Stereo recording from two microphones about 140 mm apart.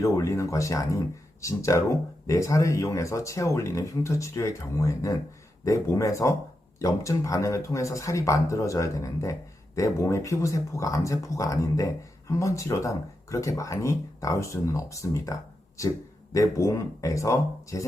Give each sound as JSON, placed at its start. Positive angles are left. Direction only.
{"t": 0.0, "sound": "speech", "side_deg": 20}